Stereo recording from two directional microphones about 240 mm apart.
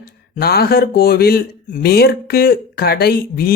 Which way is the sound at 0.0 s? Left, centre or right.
Left.